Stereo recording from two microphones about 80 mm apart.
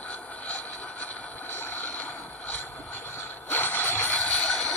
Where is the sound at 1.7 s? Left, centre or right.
Centre.